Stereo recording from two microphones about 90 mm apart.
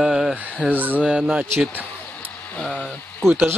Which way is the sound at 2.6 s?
5° left (ahead or behind).